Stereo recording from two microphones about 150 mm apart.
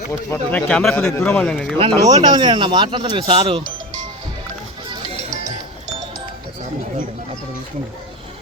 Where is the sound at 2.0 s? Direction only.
30° right (ahead or behind).